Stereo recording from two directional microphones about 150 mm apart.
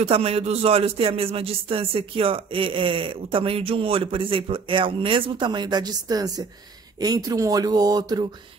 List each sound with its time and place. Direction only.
0.0 s speech: 40° right (ahead or behind); by 8.3 s 25° right (ahead or behind)